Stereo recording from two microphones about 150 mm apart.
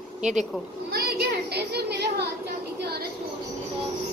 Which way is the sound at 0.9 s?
90° right.